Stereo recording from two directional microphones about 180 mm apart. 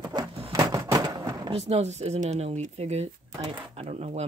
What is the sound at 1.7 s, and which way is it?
Speech, 40° right (ahead or behind).